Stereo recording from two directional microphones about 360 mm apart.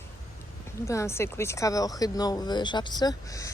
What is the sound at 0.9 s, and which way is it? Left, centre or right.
Speech, centre.